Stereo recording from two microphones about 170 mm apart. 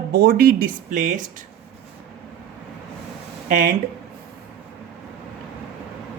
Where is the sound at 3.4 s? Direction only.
55° right (ahead or behind).